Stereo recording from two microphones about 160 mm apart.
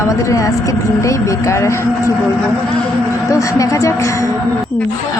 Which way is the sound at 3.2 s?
20° left (ahead or behind).